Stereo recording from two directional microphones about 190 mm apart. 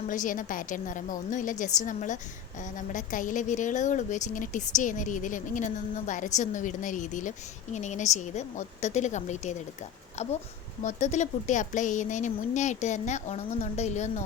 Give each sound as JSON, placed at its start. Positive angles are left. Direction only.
{"t": 0.1, "sound": "a woman's voice", "side_deg": 45}